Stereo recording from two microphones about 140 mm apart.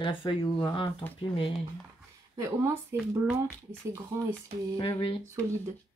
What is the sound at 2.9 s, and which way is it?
Speech, 15° right (ahead or behind).